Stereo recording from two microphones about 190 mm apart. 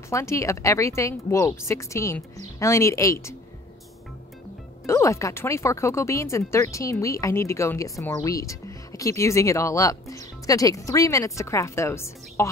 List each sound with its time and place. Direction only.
0.1 s speech: 15° left (ahead or behind)
4.8 s speech: 15° left (ahead or behind)